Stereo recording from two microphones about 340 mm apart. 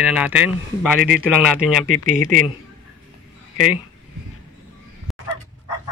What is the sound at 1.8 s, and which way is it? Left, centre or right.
Speech, left.